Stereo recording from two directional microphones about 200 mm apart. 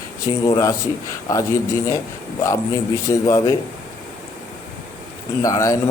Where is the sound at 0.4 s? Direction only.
20° left (ahead or behind).